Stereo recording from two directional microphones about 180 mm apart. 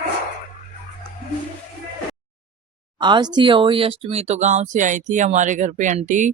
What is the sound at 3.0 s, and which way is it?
Speech, 25° right (ahead or behind).